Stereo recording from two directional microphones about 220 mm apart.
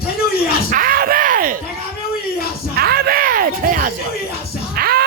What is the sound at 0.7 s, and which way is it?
Bellow, 40° right (ahead or behind).